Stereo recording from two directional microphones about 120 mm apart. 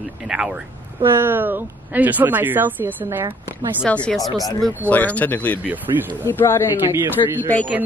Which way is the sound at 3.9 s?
10° left (ahead or behind).